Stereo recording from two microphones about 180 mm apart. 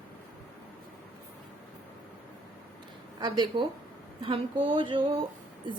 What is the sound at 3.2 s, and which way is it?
Speech, 25° right (ahead or behind).